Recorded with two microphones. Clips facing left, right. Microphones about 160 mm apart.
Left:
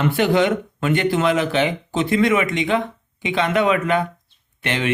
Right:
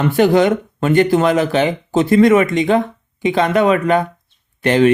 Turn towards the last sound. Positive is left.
turn(degrees=-40)  # may be behind; listen again after turning